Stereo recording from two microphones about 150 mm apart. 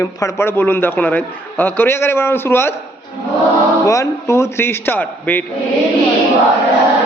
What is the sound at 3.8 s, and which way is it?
A man's voice, 20° left (ahead or behind).